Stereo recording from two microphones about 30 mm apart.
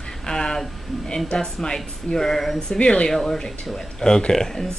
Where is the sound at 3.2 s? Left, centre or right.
Left.